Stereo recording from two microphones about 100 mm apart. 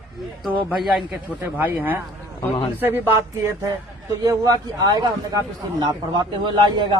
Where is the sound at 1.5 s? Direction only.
20° right (ahead or behind).